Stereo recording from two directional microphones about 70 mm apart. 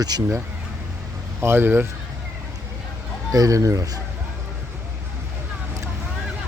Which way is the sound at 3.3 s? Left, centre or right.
Right.